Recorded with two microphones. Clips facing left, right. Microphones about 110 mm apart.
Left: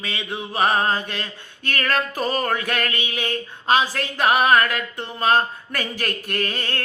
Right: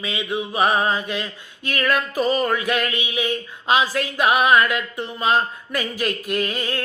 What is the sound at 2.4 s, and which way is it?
Mantra, 45° left (ahead or behind).